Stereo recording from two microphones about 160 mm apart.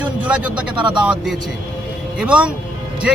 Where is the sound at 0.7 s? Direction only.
30° right (ahead or behind).